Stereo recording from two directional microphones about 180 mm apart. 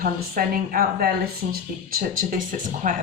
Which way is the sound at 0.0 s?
55° right (ahead or behind).